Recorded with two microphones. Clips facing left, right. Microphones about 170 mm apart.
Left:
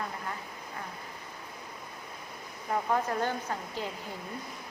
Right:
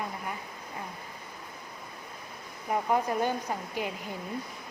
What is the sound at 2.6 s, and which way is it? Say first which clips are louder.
Speech: right 2 dB; 15° right (ahead or behind).